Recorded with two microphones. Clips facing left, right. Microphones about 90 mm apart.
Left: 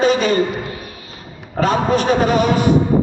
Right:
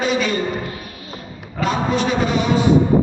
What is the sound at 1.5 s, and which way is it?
A man's voice, 45° left (ahead or behind).